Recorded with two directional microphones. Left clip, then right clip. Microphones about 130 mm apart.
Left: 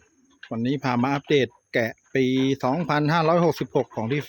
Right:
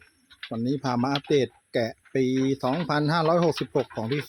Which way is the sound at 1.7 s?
40° left (ahead or behind).